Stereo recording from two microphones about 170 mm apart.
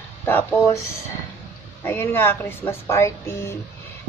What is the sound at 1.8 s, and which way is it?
A woman's voice, 15° left (ahead or behind).